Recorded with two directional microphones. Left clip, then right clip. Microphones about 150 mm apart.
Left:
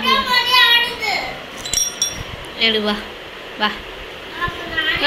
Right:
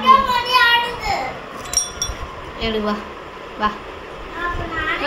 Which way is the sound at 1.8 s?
25° right (ahead or behind).